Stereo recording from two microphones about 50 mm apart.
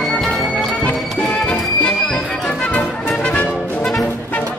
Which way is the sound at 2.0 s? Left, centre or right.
Centre.